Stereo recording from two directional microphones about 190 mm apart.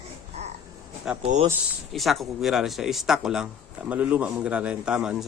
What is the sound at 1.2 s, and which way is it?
Speech, 30° right (ahead or behind).